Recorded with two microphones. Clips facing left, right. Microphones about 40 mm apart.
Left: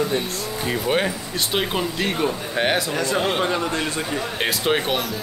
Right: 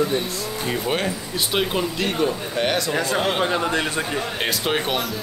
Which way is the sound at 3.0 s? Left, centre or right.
Centre.